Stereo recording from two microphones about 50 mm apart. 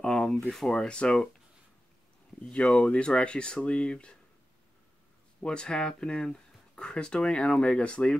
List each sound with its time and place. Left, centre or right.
0.0 s a sound: centre
0.5 s speech: centre
0.7 s speech: centre
2.4 s speech: centre
5.4 s speech: centre